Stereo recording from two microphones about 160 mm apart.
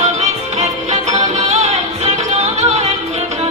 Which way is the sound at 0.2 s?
45° right (ahead or behind).